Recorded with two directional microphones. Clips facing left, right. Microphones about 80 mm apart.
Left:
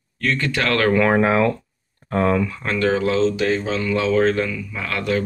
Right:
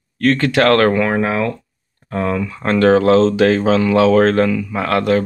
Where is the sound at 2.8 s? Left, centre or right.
Right.